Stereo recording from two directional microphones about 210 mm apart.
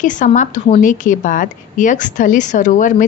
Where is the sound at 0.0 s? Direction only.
35° left (ahead or behind).